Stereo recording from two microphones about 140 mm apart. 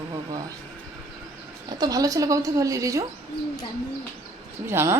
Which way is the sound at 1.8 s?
25° right (ahead or behind).